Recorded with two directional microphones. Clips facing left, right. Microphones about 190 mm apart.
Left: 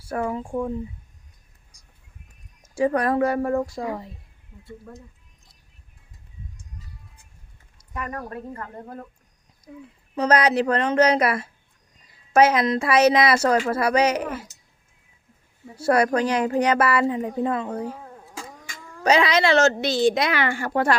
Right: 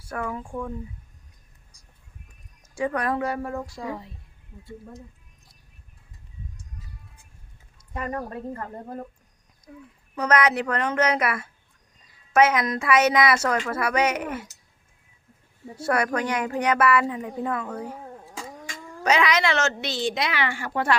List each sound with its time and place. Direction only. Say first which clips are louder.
0.0 s speech: left 5 dB; 30° left (ahead or behind)
2.7 s a woman's voice: left 5 dB; 35° left (ahead or behind); by 4.0 s 50° left (ahead or behind)
7.9 s speech: right 1 dB; 30° right (ahead or behind)
9.7 s speech: left 3 dB; 25° left (ahead or behind)
15.9 s speech: left 5 dB; 30° left (ahead or behind)
19.0 s a woman's voice: left 3 dB; 30° left (ahead or behind)